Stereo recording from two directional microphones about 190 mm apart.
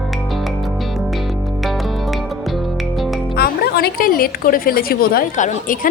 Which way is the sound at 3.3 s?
55° left (ahead or behind).